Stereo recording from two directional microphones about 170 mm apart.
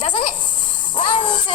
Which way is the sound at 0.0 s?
30° left (ahead or behind).